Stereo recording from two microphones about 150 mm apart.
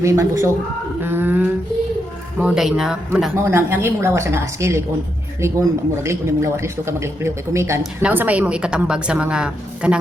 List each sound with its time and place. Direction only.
0.0 s a man's voice: 20° right (ahead or behind); by 3.3 s 5° right (ahead or behind)
3.3 s speech: 15° right (ahead or behind)